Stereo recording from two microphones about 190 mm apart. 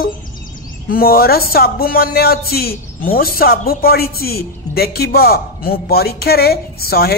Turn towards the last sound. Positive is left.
turn(degrees=55)  # may be behind; listen again after turning